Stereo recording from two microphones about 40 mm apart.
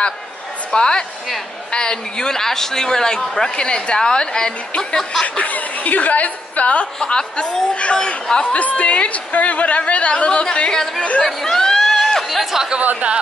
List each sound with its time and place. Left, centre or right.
0.7 s a woman's voice: left
5.4 s a woman's voice: left
7.0 s a woman's voice: left
8.3 s a woman's voice: centre
8.5 s a woman's voice: left
10.7 s a man's voice: centre
11.0 s a woman's voice: left
11.2 s chatter: centre
12.4 s speech: centre